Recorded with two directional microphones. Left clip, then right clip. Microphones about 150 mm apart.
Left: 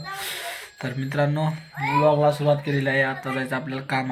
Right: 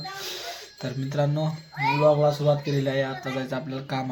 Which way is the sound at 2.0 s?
15° right (ahead or behind).